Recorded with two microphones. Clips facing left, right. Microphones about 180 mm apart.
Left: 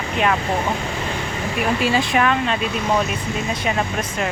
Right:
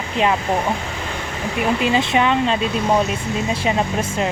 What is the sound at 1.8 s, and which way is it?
Speech, 20° right (ahead or behind).